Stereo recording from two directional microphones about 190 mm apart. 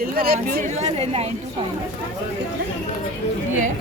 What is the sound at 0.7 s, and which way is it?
Speech, 35° right (ahead or behind).